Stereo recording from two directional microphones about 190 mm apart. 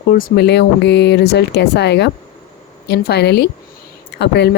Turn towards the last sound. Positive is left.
turn(degrees=65)  # may be behind; listen again after turning